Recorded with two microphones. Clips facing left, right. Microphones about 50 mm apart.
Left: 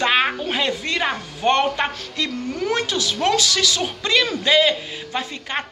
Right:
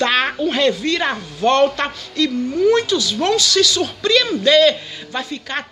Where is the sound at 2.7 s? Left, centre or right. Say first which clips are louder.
Right 6 dB; left.